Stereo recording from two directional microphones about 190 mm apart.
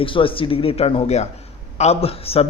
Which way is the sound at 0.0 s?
25° left (ahead or behind).